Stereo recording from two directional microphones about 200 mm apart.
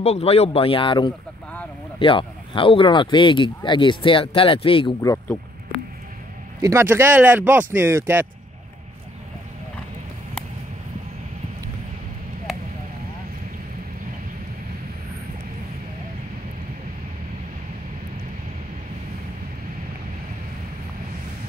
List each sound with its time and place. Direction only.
0.0 s speech: 30° left (ahead or behind); by 5.4 s 15° left (ahead or behind)
6.6 s speech: 15° right (ahead or behind)